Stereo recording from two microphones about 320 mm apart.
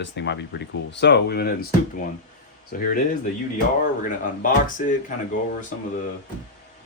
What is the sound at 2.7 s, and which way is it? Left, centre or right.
Speech, left.